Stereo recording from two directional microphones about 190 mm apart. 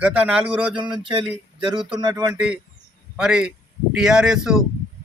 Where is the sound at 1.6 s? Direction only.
25° right (ahead or behind).